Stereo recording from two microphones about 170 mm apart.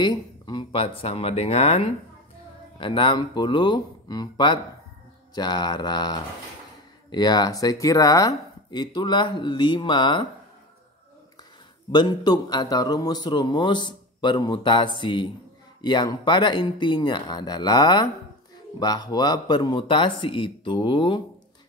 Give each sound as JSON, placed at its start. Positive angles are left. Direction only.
{"t": 0.0, "sound": "a man's voice", "side_deg": 25}
{"t": 11.9, "sound": "a man's voice", "side_deg": 25}